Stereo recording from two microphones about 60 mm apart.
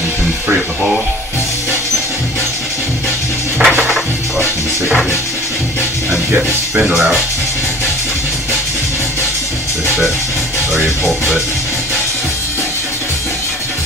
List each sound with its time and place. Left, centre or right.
3.6 s music: centre
6.9 s music: centre
10.7 s music: centre